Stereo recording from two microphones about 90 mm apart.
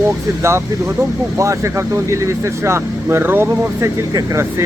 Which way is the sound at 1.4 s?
35° right (ahead or behind).